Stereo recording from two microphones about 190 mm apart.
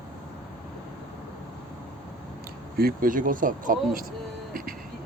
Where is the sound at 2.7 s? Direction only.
50° right (ahead or behind).